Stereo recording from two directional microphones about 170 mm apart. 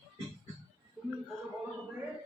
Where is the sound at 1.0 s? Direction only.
5° right (ahead or behind).